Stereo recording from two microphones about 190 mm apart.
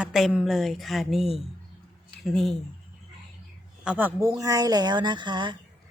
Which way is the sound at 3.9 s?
10° right (ahead or behind).